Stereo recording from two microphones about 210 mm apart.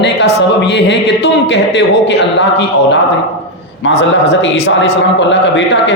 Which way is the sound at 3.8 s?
60° left (ahead or behind).